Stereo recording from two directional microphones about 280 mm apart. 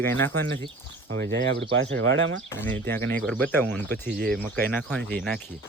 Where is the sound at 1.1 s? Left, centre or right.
Right.